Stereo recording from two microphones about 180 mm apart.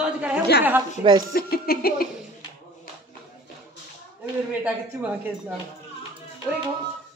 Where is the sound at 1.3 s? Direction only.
55° left (ahead or behind).